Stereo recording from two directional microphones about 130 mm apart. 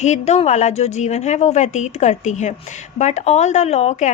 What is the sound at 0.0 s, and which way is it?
A woman's voice, 60° left (ahead or behind).